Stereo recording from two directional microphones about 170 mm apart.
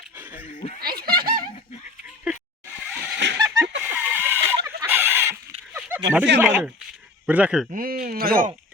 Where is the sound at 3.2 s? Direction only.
90° right.